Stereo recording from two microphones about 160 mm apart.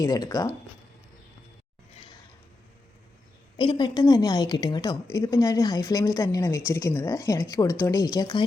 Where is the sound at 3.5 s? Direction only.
30° left (ahead or behind).